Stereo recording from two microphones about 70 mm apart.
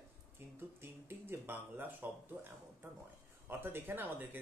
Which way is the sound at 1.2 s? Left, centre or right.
Right.